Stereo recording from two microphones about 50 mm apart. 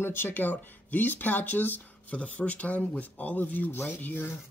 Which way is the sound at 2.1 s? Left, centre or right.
Left.